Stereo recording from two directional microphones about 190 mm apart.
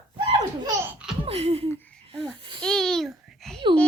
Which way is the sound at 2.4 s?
25° right (ahead or behind).